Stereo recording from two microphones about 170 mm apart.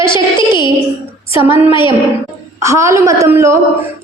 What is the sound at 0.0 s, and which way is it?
Speech, 25° left (ahead or behind).